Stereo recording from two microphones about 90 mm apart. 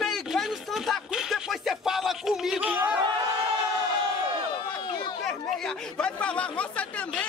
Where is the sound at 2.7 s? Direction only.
15° right (ahead or behind).